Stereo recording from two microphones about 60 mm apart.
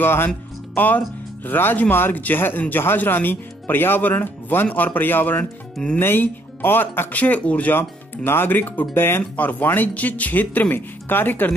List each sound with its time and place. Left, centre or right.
0.0 s speech: left
7.7 s speech: left